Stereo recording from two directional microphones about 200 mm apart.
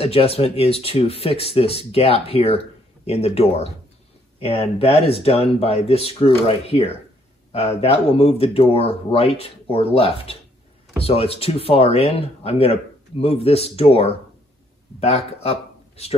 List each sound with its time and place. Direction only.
0.0 s speech: 30° left (ahead or behind)